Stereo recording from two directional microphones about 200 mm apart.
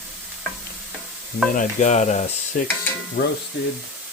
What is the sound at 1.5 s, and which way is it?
Speech, 40° left (ahead or behind).